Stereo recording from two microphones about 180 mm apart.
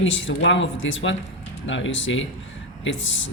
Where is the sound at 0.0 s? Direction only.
90° left.